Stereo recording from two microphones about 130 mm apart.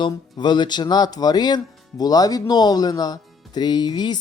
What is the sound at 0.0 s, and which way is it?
A woman's voice, 35° left (ahead or behind).